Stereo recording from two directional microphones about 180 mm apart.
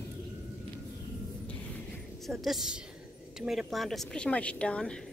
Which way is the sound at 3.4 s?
Centre (ahead or behind).